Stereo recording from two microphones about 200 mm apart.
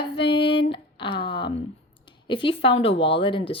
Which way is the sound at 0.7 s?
25° left (ahead or behind).